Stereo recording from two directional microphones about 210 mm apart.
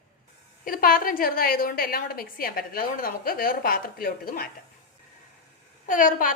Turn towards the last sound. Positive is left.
turn(degrees=40)  # may be behind; listen again after turning